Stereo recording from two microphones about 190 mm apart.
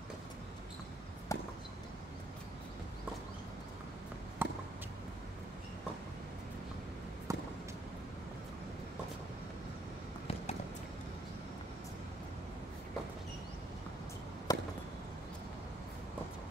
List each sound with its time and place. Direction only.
1.3 s chop: 15° left (ahead or behind)
4.4 s chop: 10° right (ahead or behind)
7.3 s a sound: 15° right (ahead or behind)
14.5 s chop: 20° left (ahead or behind)